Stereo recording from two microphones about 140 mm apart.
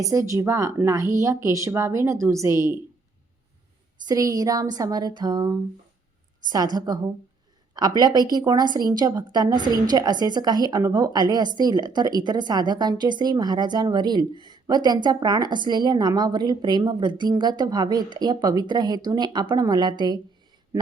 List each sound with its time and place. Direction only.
0.0 s speech: 25° right (ahead or behind)
4.0 s speech: 25° right (ahead or behind)
6.7 s a woman's voice: 30° right (ahead or behind)